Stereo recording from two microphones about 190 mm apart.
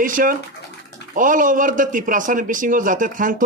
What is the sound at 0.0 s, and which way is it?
A man's voice, 45° right (ahead or behind).